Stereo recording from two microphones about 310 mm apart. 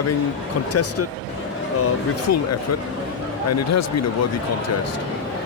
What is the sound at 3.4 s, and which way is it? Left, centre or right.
Speech, left.